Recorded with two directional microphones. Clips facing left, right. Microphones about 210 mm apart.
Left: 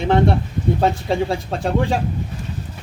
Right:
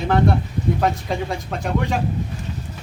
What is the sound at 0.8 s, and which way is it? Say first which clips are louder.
Speech: left 3 dB; 30° left (ahead or behind).